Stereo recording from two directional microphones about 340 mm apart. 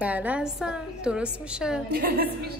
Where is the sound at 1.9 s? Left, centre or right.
Right.